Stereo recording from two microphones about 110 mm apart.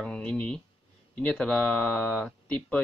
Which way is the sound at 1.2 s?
10° left (ahead or behind).